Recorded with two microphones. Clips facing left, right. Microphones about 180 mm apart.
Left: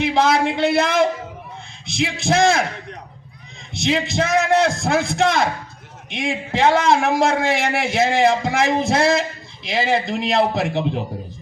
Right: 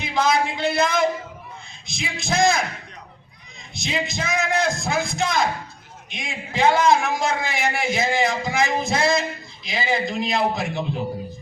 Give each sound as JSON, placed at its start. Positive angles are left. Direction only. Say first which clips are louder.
{"t": 0.0, "sound": "a man's voice", "louder": "left 4 dB", "side_deg": 75}
{"t": 3.8, "sound": "a man's voice", "louder": "left 7 dB", "side_deg": 75}